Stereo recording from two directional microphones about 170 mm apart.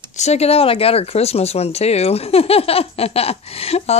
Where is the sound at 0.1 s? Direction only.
40° left (ahead or behind).